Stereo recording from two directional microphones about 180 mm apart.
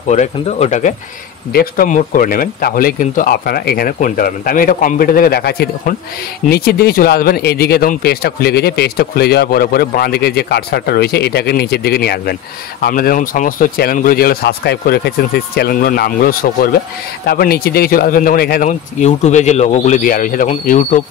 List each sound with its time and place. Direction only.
0.1 s speech: 40° left (ahead or behind)
1.5 s speech: 55° left (ahead or behind)
18.7 s speech: 40° left (ahead or behind)